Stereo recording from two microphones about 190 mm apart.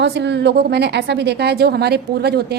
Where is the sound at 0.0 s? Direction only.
65° right (ahead or behind).